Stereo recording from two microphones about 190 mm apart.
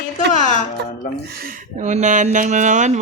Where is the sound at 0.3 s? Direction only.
40° left (ahead or behind).